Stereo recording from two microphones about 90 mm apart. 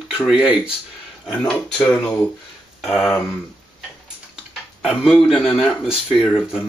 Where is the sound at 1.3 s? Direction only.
10° left (ahead or behind).